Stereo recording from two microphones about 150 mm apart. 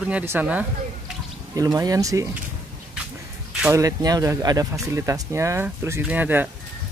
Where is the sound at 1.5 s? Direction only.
25° right (ahead or behind).